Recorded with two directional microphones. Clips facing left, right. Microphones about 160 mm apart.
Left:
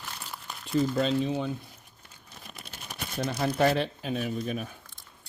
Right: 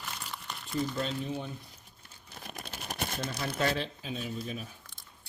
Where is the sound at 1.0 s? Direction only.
90° left.